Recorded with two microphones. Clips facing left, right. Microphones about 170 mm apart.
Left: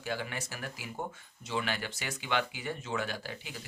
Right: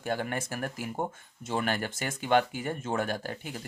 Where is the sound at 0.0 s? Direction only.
50° right (ahead or behind).